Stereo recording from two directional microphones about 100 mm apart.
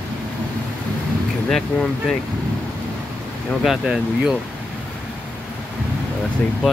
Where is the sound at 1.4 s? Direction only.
5° left (ahead or behind).